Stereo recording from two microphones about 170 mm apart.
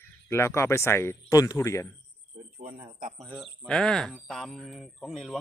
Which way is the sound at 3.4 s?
5° left (ahead or behind).